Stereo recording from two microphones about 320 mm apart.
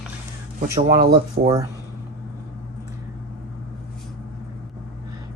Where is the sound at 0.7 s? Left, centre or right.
Centre.